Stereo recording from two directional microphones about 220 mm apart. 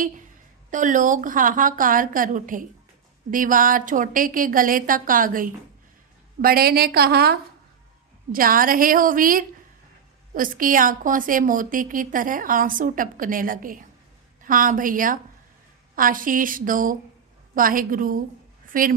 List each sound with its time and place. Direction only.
0.7 s a woman's voice: 35° right (ahead or behind)